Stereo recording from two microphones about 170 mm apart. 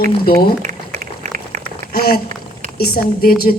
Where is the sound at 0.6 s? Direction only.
45° right (ahead or behind).